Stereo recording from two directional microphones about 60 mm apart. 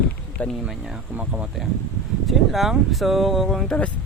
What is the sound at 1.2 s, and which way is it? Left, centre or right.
Speech, right.